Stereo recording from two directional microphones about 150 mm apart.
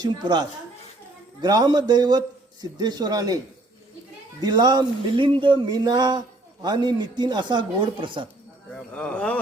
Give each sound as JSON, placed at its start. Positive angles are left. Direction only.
{"t": 0.0, "sound": "speech", "side_deg": -30}
{"t": 8.7, "sound": "speech", "side_deg": 5}